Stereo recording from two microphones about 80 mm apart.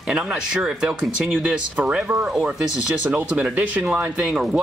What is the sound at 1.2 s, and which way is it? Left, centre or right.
Speech, right.